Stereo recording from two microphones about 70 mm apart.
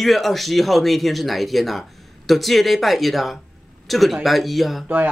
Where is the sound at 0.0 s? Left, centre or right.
Centre.